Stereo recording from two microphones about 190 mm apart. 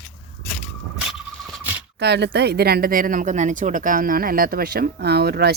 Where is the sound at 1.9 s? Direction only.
65° right (ahead or behind).